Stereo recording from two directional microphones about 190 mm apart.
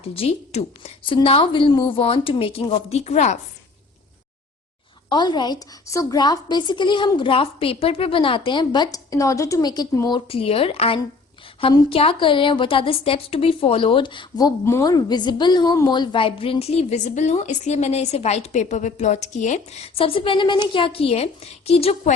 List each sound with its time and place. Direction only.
0.0 s speech: 30° left (ahead or behind)
5.0 s a woman's voice: 25° left (ahead or behind)